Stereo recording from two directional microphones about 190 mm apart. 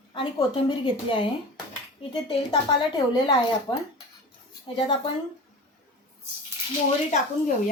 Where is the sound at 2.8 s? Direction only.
20° left (ahead or behind).